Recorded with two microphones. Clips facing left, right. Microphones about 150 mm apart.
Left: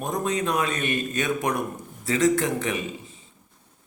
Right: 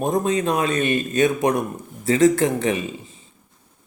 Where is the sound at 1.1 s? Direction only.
45° right (ahead or behind).